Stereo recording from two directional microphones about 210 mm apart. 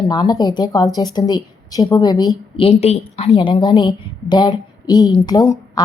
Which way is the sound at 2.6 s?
30° left (ahead or behind).